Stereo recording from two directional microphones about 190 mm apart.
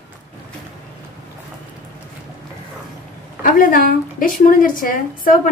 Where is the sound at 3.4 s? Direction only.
45° left (ahead or behind).